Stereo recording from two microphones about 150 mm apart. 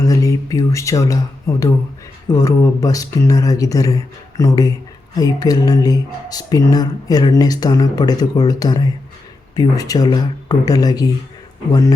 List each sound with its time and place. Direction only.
0.0 s speech: 25° left (ahead or behind)